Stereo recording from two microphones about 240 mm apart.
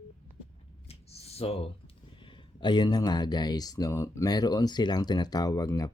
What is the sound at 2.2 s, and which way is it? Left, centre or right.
Speech, centre.